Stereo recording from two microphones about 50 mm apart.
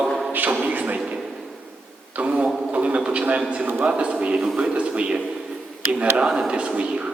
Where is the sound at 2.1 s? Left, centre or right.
Right.